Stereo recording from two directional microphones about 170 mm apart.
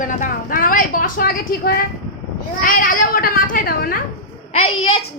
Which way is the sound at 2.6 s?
55° left (ahead or behind).